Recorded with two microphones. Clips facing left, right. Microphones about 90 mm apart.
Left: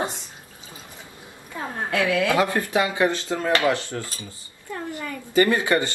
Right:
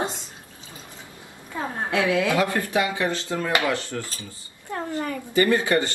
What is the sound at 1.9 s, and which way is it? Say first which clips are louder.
Speech: left 1 dB; 20° right (ahead or behind).